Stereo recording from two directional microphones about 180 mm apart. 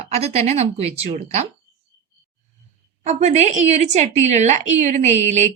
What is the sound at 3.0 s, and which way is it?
A woman's voice, 40° right (ahead or behind).